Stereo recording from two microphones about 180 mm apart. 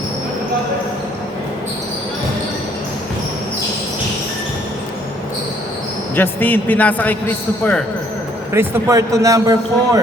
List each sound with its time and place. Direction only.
6.1 s a man's voice: 10° left (ahead or behind)
8.5 s a man's voice: 15° right (ahead or behind)